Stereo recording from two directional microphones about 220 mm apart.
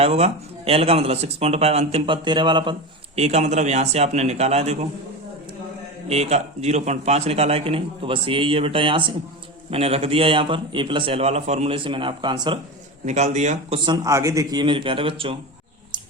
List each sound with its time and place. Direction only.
0.0 s speech: 30° right (ahead or behind)
6.1 s speech: 30° right (ahead or behind)
13.1 s speech: 30° right (ahead or behind)